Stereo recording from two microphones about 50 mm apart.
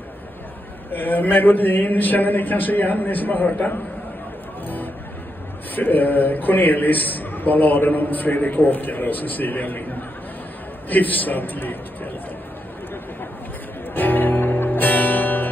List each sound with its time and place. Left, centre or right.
0.9 s a man's voice: left
5.8 s a man's voice: left
13.9 s music: left